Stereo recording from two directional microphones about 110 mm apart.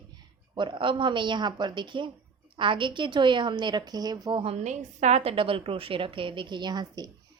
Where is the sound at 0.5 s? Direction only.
45° right (ahead or behind).